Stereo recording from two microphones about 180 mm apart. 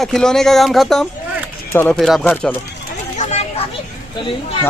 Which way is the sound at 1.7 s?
10° left (ahead or behind).